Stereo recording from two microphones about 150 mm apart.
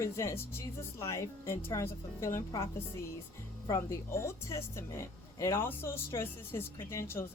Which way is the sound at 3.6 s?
20° left (ahead or behind).